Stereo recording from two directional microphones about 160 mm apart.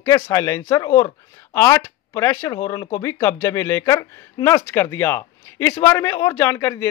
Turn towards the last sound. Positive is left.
turn(degrees=15)  # may be behind; listen again after turning